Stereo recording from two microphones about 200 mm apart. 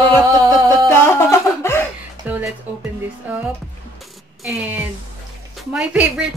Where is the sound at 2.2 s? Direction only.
10° right (ahead or behind).